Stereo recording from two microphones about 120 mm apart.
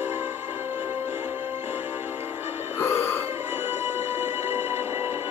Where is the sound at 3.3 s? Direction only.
15° right (ahead or behind).